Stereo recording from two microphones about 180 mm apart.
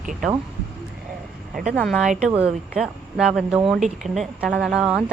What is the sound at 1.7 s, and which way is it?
A woman's voice, 5° left (ahead or behind).